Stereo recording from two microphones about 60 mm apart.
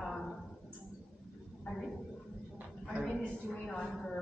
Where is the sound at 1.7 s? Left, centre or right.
Centre.